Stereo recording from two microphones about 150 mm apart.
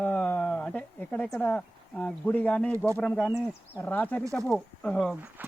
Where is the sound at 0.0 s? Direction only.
10° left (ahead or behind).